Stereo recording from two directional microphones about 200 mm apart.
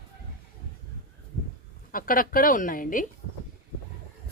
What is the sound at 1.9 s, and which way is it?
Speech, 45° left (ahead or behind).